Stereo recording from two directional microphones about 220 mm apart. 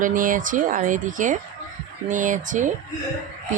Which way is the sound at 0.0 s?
40° right (ahead or behind).